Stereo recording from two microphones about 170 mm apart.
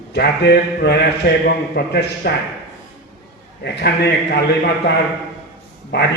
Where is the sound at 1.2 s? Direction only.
65° left (ahead or behind).